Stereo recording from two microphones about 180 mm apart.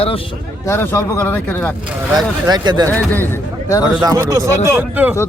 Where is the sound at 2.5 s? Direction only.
25° right (ahead or behind).